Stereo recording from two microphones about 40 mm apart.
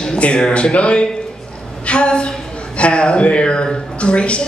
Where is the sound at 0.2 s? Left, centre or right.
Left.